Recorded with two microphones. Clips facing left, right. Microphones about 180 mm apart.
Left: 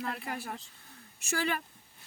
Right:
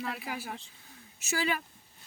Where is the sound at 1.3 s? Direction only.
50° left (ahead or behind).